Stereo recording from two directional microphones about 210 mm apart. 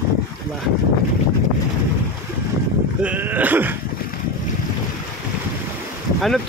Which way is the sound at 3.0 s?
10° right (ahead or behind).